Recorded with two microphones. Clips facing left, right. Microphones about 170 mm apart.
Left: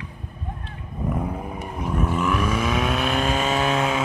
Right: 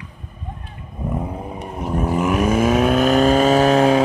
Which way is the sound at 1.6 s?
30° right (ahead or behind).